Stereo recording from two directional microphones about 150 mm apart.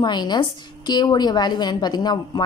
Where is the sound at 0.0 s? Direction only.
30° left (ahead or behind).